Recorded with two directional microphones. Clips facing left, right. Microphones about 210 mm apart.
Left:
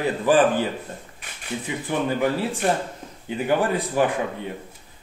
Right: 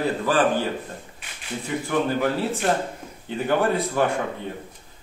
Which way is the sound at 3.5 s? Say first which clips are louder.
Right 1 dB; 10° left (ahead or behind).